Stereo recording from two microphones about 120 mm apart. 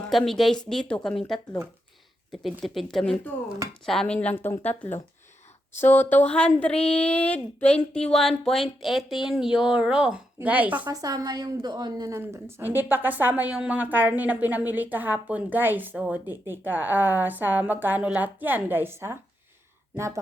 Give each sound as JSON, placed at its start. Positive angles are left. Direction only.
{"t": 0.1, "sound": "a woman's voice", "side_deg": 0}
{"t": 10.8, "sound": "a woman's voice", "side_deg": -30}
{"t": 12.2, "sound": "a woman's voice", "side_deg": -20}